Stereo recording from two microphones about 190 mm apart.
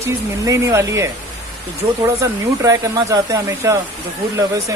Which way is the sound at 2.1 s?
15° right (ahead or behind).